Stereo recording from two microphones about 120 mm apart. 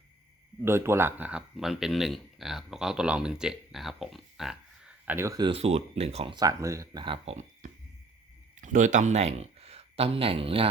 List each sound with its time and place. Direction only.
0.6 s speech: 20° right (ahead or behind)
5.1 s speech: 25° right (ahead or behind)
5.4 s speech: 50° right (ahead or behind)
6.3 s speech: 30° right (ahead or behind)
7.0 s speech: 50° right (ahead or behind)
8.6 s speech: 90° right; by 10.7 s 50° right (ahead or behind)